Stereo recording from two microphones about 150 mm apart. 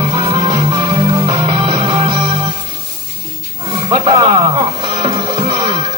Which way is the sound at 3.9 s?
35° right (ahead or behind).